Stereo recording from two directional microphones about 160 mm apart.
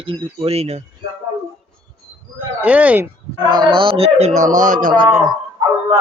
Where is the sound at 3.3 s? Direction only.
30° right (ahead or behind); by 4.9 s 55° right (ahead or behind).